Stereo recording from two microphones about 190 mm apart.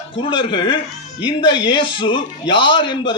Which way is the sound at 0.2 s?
25° left (ahead or behind).